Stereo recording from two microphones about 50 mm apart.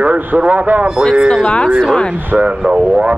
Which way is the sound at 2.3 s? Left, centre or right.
Right.